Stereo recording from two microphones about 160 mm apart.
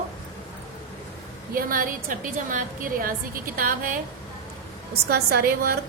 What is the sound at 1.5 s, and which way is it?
A woman's voice, 60° right (ahead or behind).